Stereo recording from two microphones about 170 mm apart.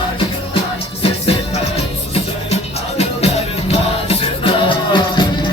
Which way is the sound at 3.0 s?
35° left (ahead or behind).